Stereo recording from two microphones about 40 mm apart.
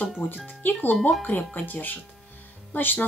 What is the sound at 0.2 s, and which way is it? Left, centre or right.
Speech, left.